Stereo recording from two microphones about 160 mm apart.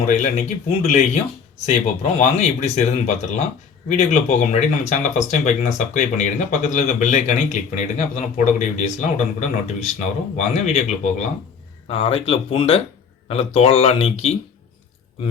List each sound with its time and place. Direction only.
0.0 s speech: 50° left (ahead or behind)